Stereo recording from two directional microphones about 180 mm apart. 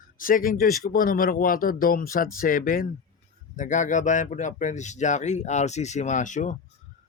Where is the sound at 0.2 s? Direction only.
50° left (ahead or behind).